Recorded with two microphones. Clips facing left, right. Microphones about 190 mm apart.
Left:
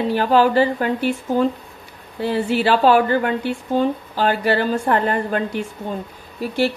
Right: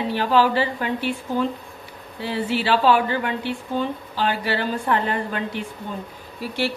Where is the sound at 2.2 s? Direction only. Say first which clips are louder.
Left 5 dB; 45° left (ahead or behind).